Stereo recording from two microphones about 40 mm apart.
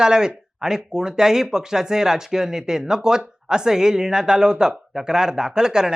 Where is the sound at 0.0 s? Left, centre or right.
Centre.